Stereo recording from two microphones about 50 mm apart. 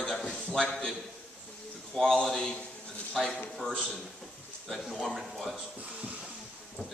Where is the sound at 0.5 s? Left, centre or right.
Centre.